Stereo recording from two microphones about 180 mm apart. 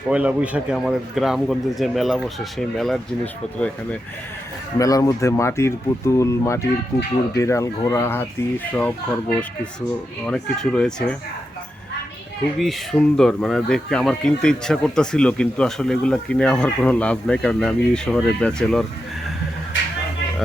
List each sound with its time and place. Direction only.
0.1 s speech: 5° right (ahead or behind)
4.8 s speech: 20° left (ahead or behind)
12.5 s speech: centre (ahead or behind)